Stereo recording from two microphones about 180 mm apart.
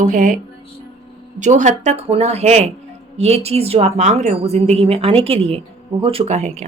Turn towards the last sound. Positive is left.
turn(degrees=-40)  # may be behind; listen again after turning